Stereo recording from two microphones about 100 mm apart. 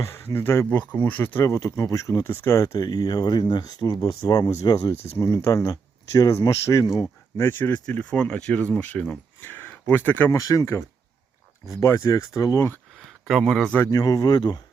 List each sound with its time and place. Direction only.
0.0 s speech: 25° left (ahead or behind)
10.3 s speech: 35° left (ahead or behind)
13.1 s speech: centre (ahead or behind)
13.9 s speech: 35° left (ahead or behind)